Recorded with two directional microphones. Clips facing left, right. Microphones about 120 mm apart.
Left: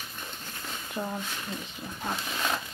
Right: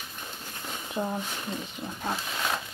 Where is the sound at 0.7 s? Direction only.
15° right (ahead or behind).